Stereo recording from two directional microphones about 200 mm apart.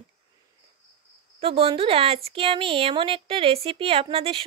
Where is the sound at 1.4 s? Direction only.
30° right (ahead or behind).